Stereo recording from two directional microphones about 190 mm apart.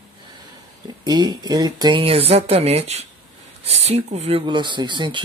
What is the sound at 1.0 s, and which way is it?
Speech, 20° right (ahead or behind).